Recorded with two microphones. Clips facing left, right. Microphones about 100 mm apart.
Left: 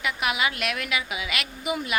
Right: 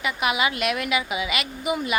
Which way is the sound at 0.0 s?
Centre (ahead or behind).